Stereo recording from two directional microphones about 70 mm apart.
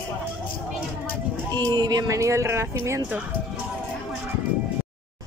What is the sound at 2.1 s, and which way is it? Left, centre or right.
Speech, right.